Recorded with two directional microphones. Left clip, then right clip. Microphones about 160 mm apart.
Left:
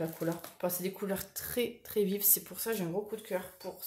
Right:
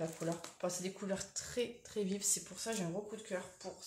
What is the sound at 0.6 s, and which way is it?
Speech, 50° left (ahead or behind).